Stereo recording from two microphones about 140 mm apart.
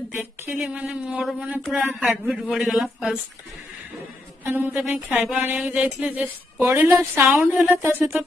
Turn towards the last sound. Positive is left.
turn(degrees=-15)  # may be behind; listen again after turning